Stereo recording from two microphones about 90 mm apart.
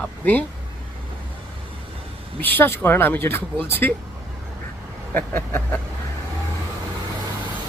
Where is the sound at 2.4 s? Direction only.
25° left (ahead or behind).